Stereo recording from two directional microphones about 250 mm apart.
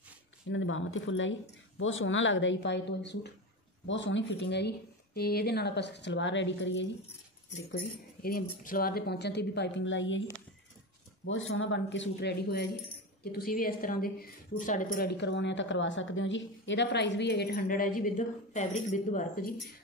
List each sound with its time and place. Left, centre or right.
0.5 s speech: left
7.7 s a woman's voice: left
11.2 s a woman's voice: left